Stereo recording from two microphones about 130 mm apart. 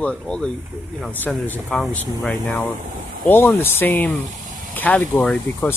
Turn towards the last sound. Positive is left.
turn(degrees=15)  # may be behind; listen again after turning